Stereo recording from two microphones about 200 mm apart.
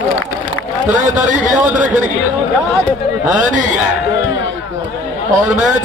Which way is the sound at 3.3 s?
40° right (ahead or behind).